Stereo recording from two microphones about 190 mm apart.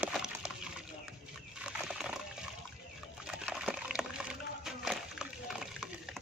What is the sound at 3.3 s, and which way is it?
Water, 5° right (ahead or behind).